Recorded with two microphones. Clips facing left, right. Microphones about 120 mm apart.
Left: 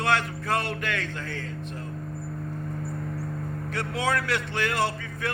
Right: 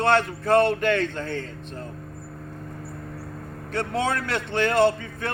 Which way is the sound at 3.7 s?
25° right (ahead or behind).